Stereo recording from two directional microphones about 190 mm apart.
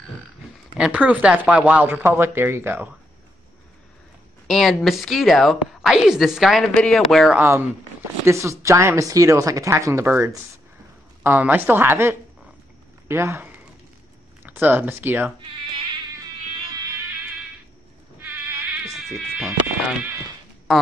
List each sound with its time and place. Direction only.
0.7 s speech: 5° right (ahead or behind)
4.5 s a woman's voice: centre (ahead or behind)
8.3 s speech: 15° right (ahead or behind)
18.2 s mosquito: 10° right (ahead or behind)
20.7 s a woman's voice: centre (ahead or behind)